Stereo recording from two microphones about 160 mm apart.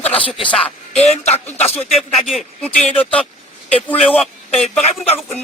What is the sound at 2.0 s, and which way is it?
A man's voice, centre (ahead or behind).